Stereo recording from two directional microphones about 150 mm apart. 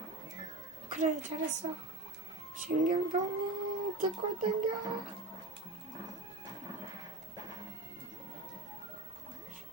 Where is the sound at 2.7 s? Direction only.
60° right (ahead or behind).